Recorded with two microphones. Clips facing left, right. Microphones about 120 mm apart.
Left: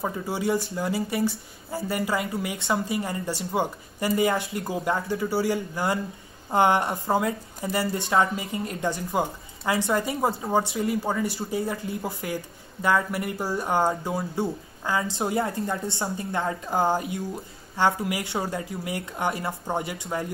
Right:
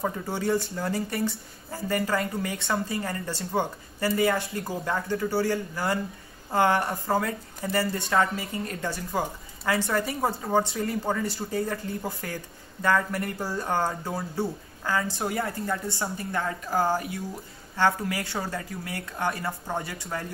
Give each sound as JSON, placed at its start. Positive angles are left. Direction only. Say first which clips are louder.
{"t": 0.0, "sound": "a woman's voice", "louder": "left 1 dB", "side_deg": 10}